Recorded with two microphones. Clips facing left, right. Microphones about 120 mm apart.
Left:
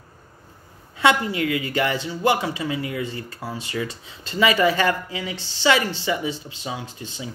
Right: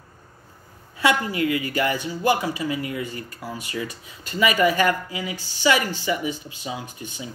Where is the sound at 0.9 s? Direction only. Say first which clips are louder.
Left 2 dB; 25° left (ahead or behind).